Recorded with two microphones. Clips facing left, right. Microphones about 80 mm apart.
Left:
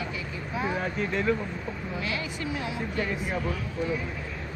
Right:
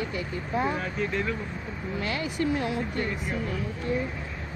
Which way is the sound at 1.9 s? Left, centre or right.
Right.